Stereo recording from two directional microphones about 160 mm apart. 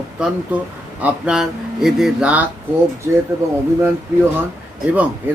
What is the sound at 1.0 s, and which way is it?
Speech, 10° right (ahead or behind).